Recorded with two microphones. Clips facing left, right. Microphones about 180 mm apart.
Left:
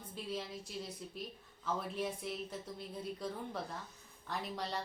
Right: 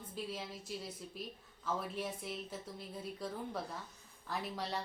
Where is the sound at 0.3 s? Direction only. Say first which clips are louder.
Left 1 dB; centre (ahead or behind).